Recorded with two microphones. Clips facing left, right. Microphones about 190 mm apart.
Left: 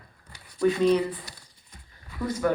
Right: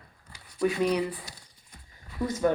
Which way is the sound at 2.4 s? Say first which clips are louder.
Even; 25° right (ahead or behind).